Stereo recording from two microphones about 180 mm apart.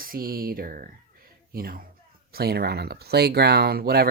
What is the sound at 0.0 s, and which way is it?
Speech, 55° right (ahead or behind).